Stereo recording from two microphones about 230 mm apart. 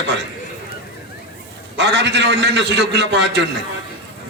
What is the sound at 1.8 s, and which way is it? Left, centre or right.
A man's voice, right.